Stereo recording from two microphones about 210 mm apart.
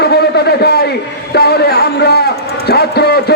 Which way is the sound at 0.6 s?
50° left (ahead or behind).